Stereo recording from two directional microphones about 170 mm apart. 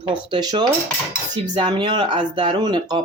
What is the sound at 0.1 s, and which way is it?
Speech, 25° right (ahead or behind).